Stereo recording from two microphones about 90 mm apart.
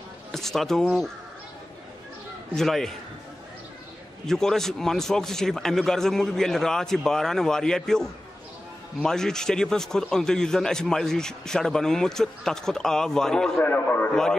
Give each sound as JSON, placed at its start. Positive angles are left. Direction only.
{"t": 0.3, "sound": "speech", "side_deg": 5}
{"t": 2.5, "sound": "a man's voice", "side_deg": 5}
{"t": 4.3, "sound": "a man's voice", "side_deg": 5}
{"t": 13.6, "sound": "a man's voice", "side_deg": 25}